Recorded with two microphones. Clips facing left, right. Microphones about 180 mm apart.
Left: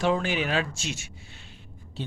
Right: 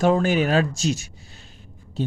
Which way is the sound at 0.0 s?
45° right (ahead or behind).